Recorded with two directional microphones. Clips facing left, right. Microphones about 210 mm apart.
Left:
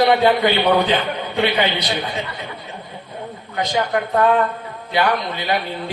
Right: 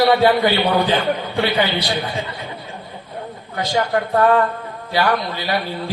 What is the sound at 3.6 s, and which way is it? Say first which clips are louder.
A man's voice: right 1 dB; 20° left (ahead or behind).